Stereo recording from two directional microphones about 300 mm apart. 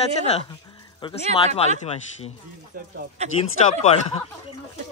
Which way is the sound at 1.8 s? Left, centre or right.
Left.